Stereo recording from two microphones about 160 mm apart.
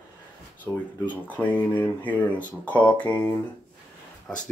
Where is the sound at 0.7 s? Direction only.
10° left (ahead or behind).